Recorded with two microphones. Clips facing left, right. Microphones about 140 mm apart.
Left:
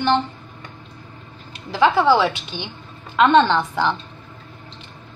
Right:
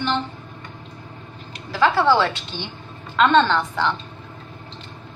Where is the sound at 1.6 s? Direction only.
20° left (ahead or behind).